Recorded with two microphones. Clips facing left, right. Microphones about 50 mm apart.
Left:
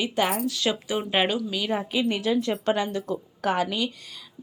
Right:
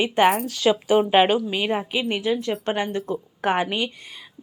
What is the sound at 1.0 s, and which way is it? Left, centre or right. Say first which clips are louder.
Speech: right 4 dB; centre.